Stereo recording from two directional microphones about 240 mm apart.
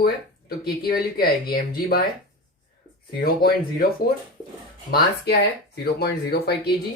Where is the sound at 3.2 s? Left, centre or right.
Left.